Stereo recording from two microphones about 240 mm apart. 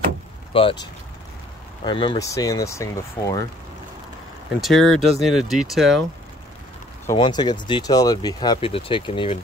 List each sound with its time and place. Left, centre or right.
0.5 s speech: left
1.9 s speech: centre
4.6 s speech: centre
7.1 s speech: centre